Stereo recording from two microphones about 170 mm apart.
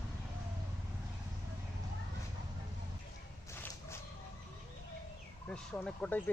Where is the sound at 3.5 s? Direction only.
15° left (ahead or behind).